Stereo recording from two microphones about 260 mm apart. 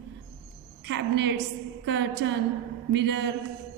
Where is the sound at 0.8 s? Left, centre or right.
Right.